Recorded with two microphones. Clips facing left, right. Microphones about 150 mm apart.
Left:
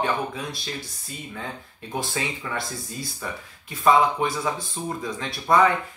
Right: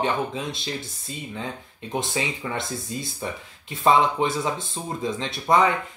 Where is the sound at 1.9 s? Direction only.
20° right (ahead or behind).